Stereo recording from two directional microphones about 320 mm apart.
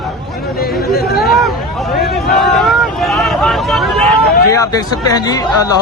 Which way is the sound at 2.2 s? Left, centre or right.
Centre.